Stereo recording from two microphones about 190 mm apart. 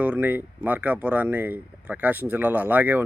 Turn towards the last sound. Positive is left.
turn(degrees=-10)  # may be behind; listen again after turning